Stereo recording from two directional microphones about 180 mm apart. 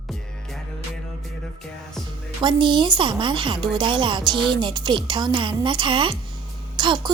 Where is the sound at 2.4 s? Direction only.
25° right (ahead or behind).